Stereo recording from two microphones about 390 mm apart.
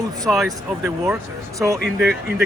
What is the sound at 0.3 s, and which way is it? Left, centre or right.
Speech, centre.